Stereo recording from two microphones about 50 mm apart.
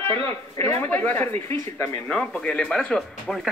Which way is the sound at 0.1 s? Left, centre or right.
Left.